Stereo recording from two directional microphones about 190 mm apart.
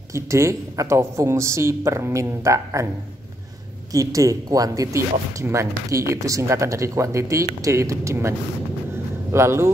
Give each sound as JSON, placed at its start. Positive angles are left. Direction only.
{"t": 0.1, "sound": "speech", "side_deg": -15}
{"t": 3.9, "sound": "speech", "side_deg": -15}